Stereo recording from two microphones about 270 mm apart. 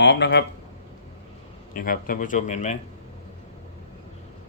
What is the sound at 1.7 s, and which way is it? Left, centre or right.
Speech, left.